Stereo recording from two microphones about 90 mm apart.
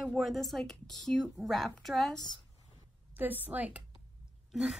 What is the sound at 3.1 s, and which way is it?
Speech, 20° right (ahead or behind).